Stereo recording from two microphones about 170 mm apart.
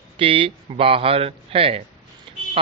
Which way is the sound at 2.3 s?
30° right (ahead or behind).